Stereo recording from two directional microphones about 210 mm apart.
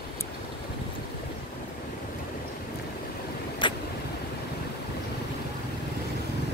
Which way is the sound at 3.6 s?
20° left (ahead or behind).